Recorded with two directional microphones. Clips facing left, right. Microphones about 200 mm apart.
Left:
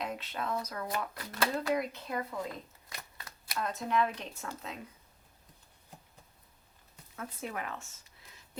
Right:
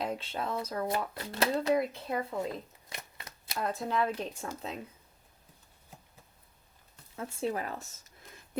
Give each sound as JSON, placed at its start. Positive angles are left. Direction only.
{"t": 0.0, "sound": "speech", "side_deg": -30}
{"t": 2.9, "sound": "shuffling cards", "side_deg": -20}
{"t": 4.4, "sound": "speech", "side_deg": -30}
{"t": 7.2, "sound": "speech", "side_deg": -30}